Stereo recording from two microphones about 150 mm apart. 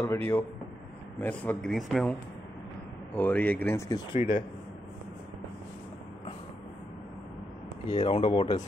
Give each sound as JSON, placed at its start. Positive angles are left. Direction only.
{"t": 0.0, "sound": "speech", "side_deg": 15}
{"t": 3.2, "sound": "speech", "side_deg": 10}
{"t": 4.1, "sound": "speech", "side_deg": 50}
{"t": 7.9, "sound": "speech", "side_deg": 35}